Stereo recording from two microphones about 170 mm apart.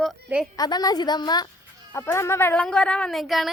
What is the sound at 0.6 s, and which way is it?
A woman's voice, 25° left (ahead or behind).